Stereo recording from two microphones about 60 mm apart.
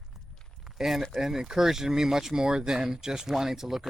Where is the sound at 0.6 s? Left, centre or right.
Centre.